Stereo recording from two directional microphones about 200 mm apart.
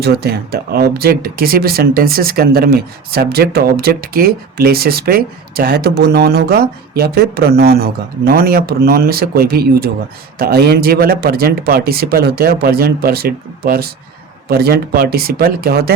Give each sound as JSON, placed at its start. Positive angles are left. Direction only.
{"t": 0.0, "sound": "speech", "side_deg": -55}